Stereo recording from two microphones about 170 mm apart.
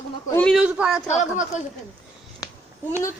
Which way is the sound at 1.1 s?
45° left (ahead or behind).